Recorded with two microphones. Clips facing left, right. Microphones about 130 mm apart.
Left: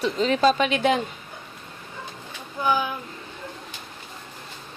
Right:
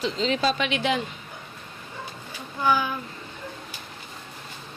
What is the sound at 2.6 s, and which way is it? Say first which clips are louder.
Speech: even; 15° left (ahead or behind).